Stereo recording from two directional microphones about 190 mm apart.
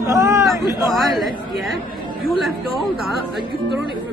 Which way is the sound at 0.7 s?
20° left (ahead or behind).